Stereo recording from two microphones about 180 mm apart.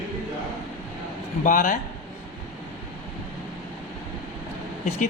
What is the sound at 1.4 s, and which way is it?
Speech, 50° left (ahead or behind).